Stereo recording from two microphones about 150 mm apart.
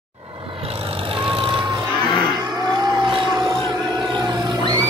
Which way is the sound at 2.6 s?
25° right (ahead or behind).